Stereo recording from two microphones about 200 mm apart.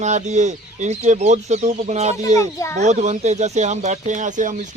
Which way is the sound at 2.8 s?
35° right (ahead or behind).